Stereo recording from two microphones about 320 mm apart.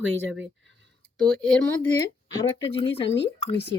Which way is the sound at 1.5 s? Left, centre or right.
Centre.